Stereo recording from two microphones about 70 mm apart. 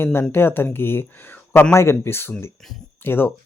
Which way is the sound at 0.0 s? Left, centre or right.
Left.